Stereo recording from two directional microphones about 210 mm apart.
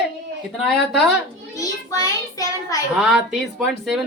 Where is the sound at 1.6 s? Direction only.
15° left (ahead or behind).